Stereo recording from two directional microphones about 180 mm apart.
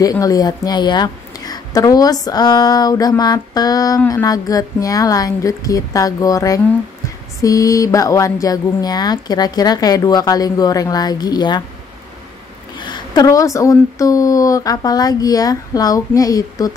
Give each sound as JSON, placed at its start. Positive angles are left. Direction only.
{"t": 0.0, "sound": "a woman's voice", "side_deg": 20}
{"t": 12.7, "sound": "speech", "side_deg": 25}